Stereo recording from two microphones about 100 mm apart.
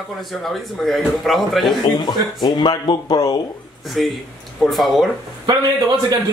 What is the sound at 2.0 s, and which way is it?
Speech, 45° left (ahead or behind).